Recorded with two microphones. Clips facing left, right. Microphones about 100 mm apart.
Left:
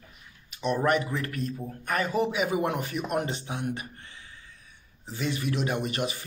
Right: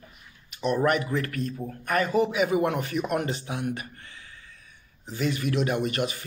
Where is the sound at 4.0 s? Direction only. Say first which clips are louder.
Right 1 dB; 30° left (ahead or behind).